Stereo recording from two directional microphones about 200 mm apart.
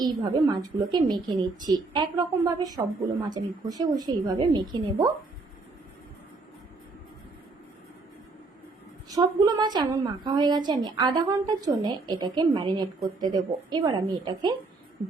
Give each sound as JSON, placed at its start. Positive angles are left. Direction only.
{"t": 0.0, "sound": "a woman's voice", "side_deg": -20}
{"t": 9.0, "sound": "a woman's voice", "side_deg": -20}